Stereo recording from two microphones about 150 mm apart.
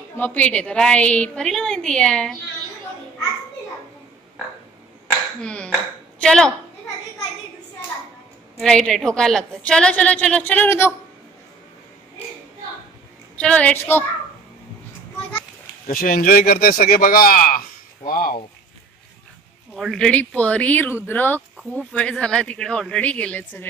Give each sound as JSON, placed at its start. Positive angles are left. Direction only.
{"t": 0.1, "sound": "a woman's voice", "side_deg": 10}
{"t": 5.4, "sound": "a woman's voice", "side_deg": 5}
{"t": 8.5, "sound": "a woman's voice", "side_deg": 5}
{"t": 13.4, "sound": "a woman's voice", "side_deg": 10}
{"t": 15.9, "sound": "speech", "side_deg": 75}
{"t": 19.7, "sound": "a woman's voice", "side_deg": 5}